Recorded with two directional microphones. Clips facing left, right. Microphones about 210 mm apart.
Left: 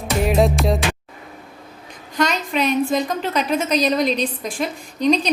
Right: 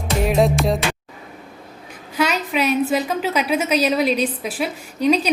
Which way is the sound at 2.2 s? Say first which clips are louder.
Even; 5° right (ahead or behind).